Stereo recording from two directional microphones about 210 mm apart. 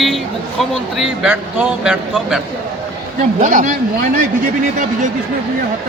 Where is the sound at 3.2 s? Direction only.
35° right (ahead or behind).